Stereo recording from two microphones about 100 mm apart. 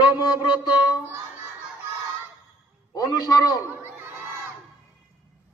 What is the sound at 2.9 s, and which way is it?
Speech, 40° left (ahead or behind).